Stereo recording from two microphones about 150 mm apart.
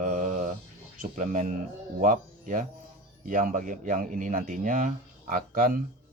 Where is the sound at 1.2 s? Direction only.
55° right (ahead or behind).